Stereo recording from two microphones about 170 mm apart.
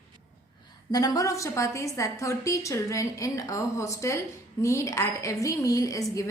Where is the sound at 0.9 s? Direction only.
20° left (ahead or behind).